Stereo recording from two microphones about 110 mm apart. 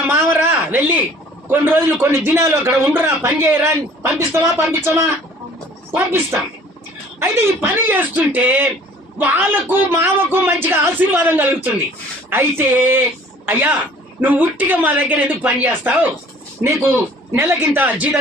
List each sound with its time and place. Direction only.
0.1 s a sound: 20° right (ahead or behind)
1.5 s a man's voice: 20° right (ahead or behind)
17.3 s a woman's voice: 20° right (ahead or behind)